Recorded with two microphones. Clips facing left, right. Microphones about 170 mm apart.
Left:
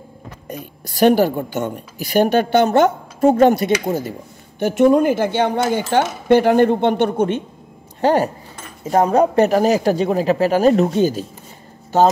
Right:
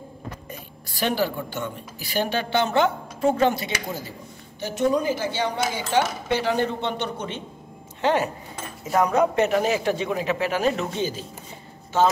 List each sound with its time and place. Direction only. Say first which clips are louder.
0.5 s a woman's voice: left 8 dB; 45° left (ahead or behind)
8.0 s speech: left 6 dB; 40° left (ahead or behind)